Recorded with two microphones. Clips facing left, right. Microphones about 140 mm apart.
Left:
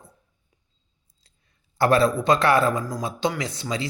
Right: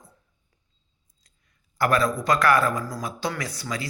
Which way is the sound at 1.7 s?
30° left (ahead or behind).